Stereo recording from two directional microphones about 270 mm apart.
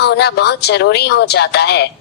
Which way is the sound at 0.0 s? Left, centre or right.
Left.